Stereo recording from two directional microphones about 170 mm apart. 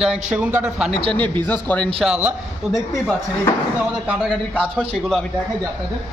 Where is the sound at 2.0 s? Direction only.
5° right (ahead or behind).